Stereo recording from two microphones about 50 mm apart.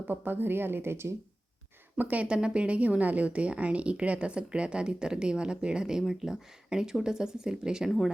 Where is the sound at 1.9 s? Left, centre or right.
Right.